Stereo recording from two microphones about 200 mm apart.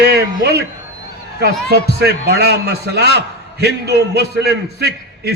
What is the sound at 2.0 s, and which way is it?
A man's voice, 55° right (ahead or behind).